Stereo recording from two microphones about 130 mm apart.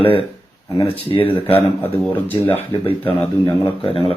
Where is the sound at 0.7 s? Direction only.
45° left (ahead or behind).